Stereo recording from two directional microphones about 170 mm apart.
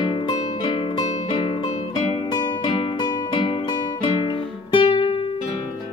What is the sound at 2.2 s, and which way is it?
Music, 25° left (ahead or behind).